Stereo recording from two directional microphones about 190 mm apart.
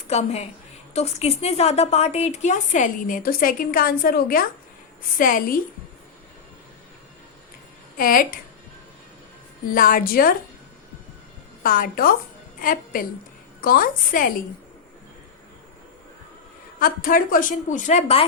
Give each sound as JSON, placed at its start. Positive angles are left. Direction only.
{"t": 0.1, "sound": "a woman's voice", "side_deg": 35}
{"t": 7.9, "sound": "a woman's voice", "side_deg": 45}
{"t": 9.7, "sound": "a woman's voice", "side_deg": 50}
{"t": 11.6, "sound": "a woman's voice", "side_deg": 45}
{"t": 16.8, "sound": "a woman's voice", "side_deg": 50}